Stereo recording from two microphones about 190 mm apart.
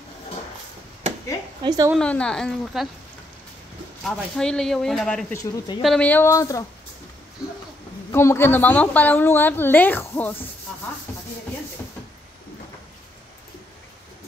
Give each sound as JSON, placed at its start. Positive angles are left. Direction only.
{"t": 1.6, "sound": "a woman's voice", "side_deg": -20}
{"t": 2.0, "sound": "speech", "side_deg": 5}
{"t": 4.0, "sound": "speech", "side_deg": 5}
{"t": 5.3, "sound": "speech", "side_deg": 20}
{"t": 5.8, "sound": "a woman's voice", "side_deg": 5}
{"t": 8.1, "sound": "a woman's voice", "side_deg": 15}